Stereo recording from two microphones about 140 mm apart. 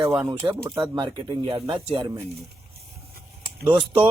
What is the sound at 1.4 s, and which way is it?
Speech, 40° right (ahead or behind).